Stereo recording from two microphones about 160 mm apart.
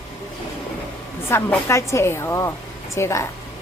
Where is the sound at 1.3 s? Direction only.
15° left (ahead or behind).